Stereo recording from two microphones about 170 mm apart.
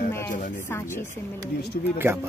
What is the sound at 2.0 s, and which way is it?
Speech, 15° right (ahead or behind).